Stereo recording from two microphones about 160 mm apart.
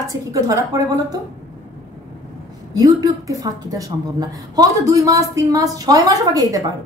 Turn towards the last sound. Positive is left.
turn(degrees=-20)  # may be behind; listen again after turning